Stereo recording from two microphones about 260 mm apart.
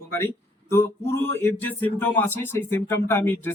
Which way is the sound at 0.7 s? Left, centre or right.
Centre.